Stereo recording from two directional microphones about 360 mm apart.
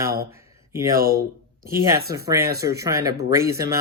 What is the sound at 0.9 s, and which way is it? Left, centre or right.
Speech, right.